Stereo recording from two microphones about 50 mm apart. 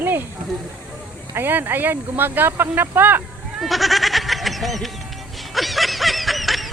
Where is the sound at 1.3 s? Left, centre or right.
Right.